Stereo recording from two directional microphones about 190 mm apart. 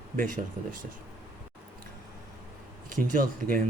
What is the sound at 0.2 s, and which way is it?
Speech, 45° right (ahead or behind).